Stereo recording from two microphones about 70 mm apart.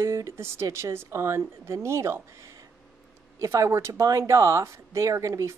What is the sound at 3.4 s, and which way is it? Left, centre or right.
Speech, right.